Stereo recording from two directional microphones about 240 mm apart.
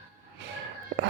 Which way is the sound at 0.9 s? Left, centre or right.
Right.